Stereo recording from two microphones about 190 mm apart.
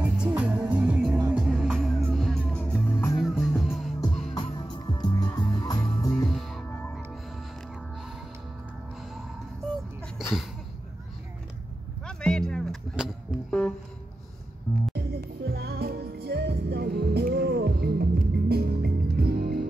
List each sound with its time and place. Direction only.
0.0 s music: 5° right (ahead or behind); by 3.2 s 15° left (ahead or behind)
3.2 s music: centre (ahead or behind)
4.4 s music: 20° left (ahead or behind)
6.2 s music: centre (ahead or behind)
10.2 s a sound: centre (ahead or behind)
12.1 s music: 5° left (ahead or behind)
15.0 s music: 55° right (ahead or behind)